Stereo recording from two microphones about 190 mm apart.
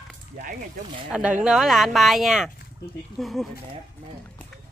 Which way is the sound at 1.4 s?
Centre (ahead or behind).